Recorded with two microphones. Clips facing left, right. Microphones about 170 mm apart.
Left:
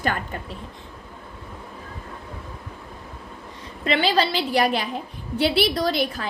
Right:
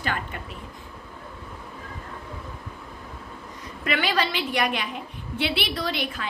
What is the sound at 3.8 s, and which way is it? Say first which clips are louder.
A woman's voice: left 4 dB; 30° left (ahead or behind).